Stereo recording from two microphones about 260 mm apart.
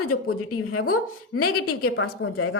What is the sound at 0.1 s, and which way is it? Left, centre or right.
A woman's voice, left.